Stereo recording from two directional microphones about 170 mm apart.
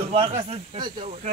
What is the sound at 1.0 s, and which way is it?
Speech, 45° right (ahead or behind).